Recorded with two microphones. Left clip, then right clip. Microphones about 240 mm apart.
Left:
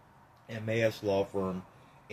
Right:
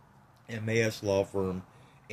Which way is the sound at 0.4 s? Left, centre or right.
Right.